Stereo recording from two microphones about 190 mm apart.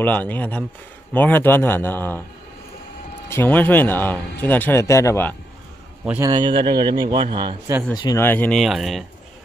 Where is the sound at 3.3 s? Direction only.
10° left (ahead or behind).